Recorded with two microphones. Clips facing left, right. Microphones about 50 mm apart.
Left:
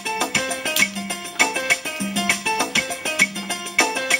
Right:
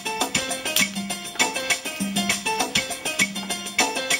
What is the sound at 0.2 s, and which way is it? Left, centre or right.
Music, left.